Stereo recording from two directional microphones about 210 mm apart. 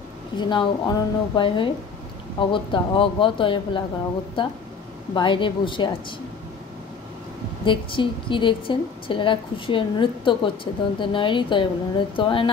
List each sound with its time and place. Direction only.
0.4 s a woman's voice: 20° left (ahead or behind)
7.6 s a woman's voice: 25° left (ahead or behind)